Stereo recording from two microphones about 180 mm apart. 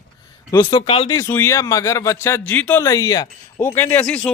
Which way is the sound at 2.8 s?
20° left (ahead or behind).